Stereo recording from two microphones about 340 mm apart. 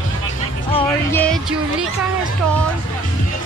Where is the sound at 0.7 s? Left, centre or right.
Centre.